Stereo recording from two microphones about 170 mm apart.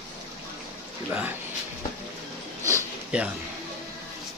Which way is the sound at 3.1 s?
5° right (ahead or behind).